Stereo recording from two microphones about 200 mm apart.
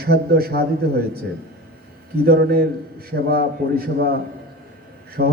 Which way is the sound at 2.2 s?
50° right (ahead or behind).